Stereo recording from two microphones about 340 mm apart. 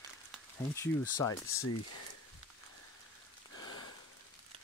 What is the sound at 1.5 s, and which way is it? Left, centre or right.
Speech, left.